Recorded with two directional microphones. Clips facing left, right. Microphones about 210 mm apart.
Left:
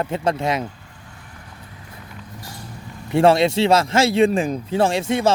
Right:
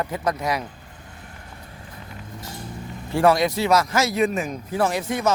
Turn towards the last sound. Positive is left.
turn(degrees=25)  # may be behind; listen again after turning